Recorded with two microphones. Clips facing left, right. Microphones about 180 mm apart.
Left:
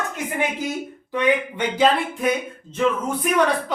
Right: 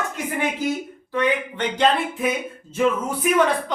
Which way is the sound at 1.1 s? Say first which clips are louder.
Left 2 dB; 15° left (ahead or behind).